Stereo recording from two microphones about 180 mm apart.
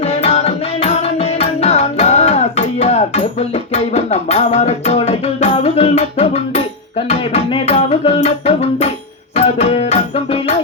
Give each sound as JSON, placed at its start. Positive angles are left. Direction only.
{"t": 0.0, "sound": "music", "side_deg": 35}